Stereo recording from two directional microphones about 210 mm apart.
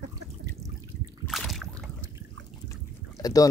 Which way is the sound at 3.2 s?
15° left (ahead or behind).